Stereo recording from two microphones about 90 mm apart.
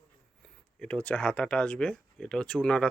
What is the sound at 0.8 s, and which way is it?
Speech, 10° left (ahead or behind).